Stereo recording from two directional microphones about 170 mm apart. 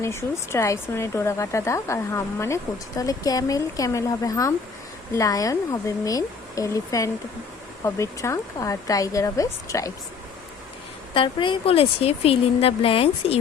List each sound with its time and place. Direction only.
0.0 s speech: 15° left (ahead or behind)
11.1 s speech: 30° left (ahead or behind)